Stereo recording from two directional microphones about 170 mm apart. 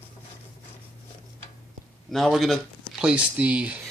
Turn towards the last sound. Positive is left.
turn(degrees=-10)  # may be behind; listen again after turning